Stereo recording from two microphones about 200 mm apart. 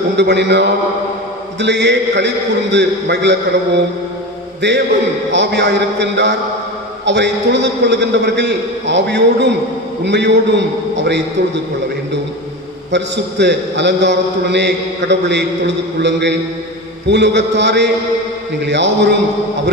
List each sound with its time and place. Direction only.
0.2 s a man's voice: 60° right (ahead or behind)
12.9 s a man's voice: 60° right (ahead or behind)